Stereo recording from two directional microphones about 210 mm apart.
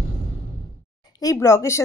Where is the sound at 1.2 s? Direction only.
15° left (ahead or behind).